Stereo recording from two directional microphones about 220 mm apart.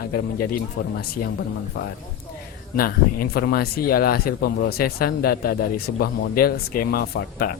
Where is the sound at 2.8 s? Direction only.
40° left (ahead or behind).